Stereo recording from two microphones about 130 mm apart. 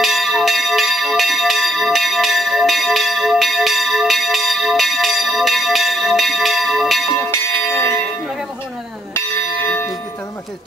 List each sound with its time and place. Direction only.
0.0 s bell: centre (ahead or behind)
7.2 s church bell: 15° left (ahead or behind)